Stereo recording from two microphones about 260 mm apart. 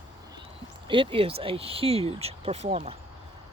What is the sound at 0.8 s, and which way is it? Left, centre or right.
Speech, centre.